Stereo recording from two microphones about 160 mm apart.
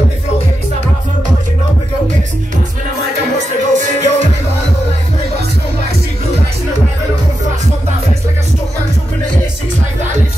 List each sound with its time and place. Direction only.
3.3 s music: 50° right (ahead or behind)